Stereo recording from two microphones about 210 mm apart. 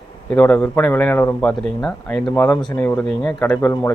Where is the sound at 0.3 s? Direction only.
10° left (ahead or behind).